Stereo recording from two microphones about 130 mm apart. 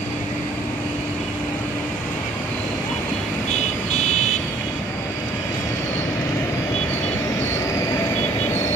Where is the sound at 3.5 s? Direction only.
60° left (ahead or behind).